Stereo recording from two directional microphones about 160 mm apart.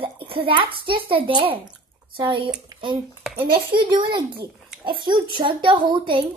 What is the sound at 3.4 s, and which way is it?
Speech, 70° right (ahead or behind).